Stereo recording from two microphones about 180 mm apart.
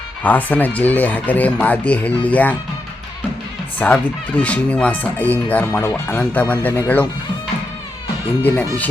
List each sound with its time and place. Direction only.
0.2 s speech: 10° left (ahead or behind)
3.8 s speech: 5° left (ahead or behind)
8.4 s speech: 10° left (ahead or behind)